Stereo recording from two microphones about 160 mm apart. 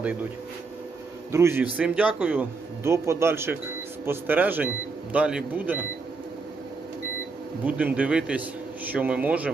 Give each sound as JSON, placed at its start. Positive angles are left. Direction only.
{"t": 1.3, "sound": "speech", "side_deg": -15}
{"t": 7.6, "sound": "speech", "side_deg": -10}